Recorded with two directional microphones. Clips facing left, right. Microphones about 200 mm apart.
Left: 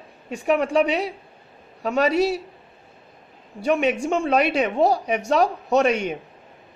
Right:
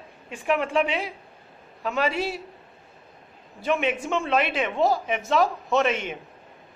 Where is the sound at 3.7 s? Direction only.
40° left (ahead or behind).